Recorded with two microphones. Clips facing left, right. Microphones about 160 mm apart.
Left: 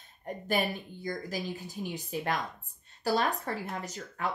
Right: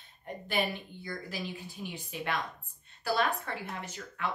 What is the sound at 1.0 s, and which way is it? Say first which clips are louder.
A woman's voice: left 4 dB; 40° left (ahead or behind).